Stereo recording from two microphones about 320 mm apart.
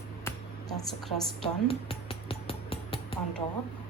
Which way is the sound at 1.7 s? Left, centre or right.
Centre.